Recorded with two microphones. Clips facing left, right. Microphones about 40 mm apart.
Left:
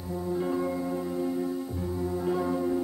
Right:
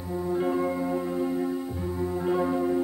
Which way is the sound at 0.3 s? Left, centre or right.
Right.